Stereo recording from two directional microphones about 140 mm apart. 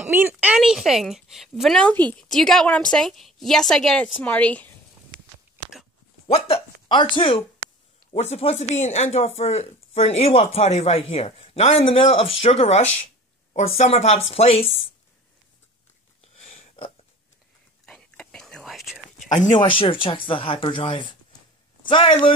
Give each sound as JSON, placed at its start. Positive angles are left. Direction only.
{"t": 0.0, "sound": "a sound", "side_deg": -15}
{"t": 0.6, "sound": "a woman's voice", "side_deg": -5}
{"t": 6.2, "sound": "speech", "side_deg": 45}
{"t": 8.1, "sound": "speech", "side_deg": 50}
{"t": 16.3, "sound": "a sound", "side_deg": 45}
{"t": 17.8, "sound": "whispering", "side_deg": 5}
{"t": 19.5, "sound": "speech", "side_deg": 35}